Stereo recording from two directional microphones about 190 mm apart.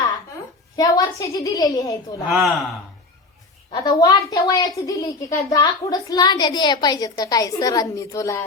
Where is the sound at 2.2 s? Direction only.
Centre (ahead or behind).